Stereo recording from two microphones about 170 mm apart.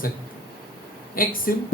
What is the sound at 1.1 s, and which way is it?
Speech, 55° left (ahead or behind).